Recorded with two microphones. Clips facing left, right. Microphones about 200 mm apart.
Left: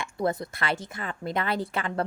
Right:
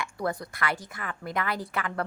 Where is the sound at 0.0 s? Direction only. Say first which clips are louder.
Left 3 dB; 25° left (ahead or behind).